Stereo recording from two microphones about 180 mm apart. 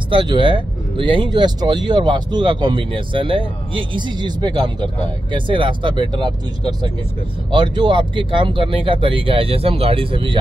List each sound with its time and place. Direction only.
0.1 s speech: 25° right (ahead or behind)